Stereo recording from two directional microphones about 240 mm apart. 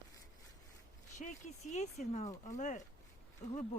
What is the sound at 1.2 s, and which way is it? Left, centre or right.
Speech, left.